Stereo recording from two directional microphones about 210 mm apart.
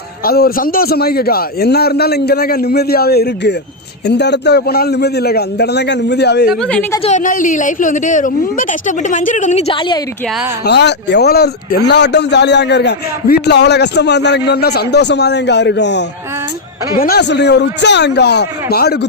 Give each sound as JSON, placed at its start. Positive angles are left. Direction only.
{"t": 0.3, "sound": "a man's voice", "side_deg": 45}
{"t": 6.5, "sound": "a woman's voice", "side_deg": 5}
{"t": 7.0, "sound": "speech", "side_deg": 35}
{"t": 10.7, "sound": "a man's voice", "side_deg": 55}